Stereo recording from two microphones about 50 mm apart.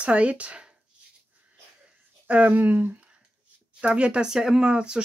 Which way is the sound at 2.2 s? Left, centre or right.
Right.